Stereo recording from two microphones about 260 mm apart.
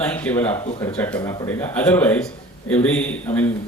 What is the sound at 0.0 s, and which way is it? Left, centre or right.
A man's voice, centre.